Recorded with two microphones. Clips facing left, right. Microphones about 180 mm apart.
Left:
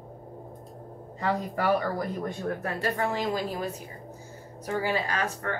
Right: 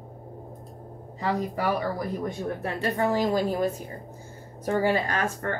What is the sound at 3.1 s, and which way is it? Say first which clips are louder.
Speech: right 5 dB; 45° right (ahead or behind).